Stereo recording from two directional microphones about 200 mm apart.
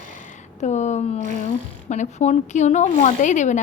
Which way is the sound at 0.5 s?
35° left (ahead or behind).